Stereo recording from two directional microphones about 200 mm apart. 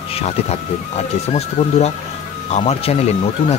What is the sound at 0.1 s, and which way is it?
Speech, 30° left (ahead or behind).